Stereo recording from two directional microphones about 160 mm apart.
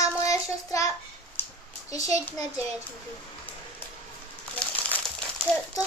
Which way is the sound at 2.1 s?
20° left (ahead or behind).